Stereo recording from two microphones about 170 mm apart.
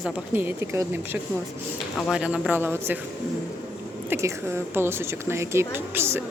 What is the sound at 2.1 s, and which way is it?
Speech, 5° right (ahead or behind).